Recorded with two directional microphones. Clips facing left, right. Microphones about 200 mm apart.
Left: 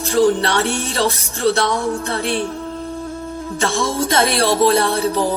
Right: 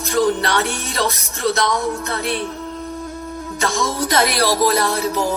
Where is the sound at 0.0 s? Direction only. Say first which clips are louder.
Left 3 dB; 30° left (ahead or behind).